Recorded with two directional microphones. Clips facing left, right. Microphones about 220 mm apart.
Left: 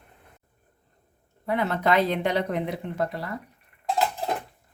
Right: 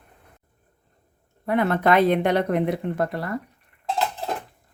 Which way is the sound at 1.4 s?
55° right (ahead or behind).